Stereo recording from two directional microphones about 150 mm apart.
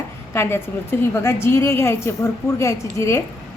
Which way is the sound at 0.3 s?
15° left (ahead or behind).